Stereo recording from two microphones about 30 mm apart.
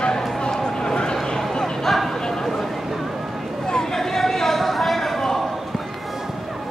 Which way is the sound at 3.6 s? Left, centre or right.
Centre.